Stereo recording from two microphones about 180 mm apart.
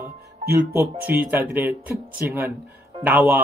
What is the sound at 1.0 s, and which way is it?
Speech, 10° right (ahead or behind).